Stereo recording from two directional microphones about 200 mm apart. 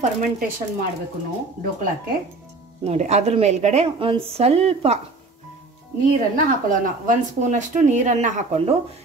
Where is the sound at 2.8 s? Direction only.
35° right (ahead or behind).